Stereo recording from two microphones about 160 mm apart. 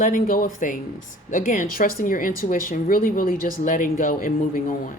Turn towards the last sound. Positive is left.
turn(degrees=55)  # may be behind; listen again after turning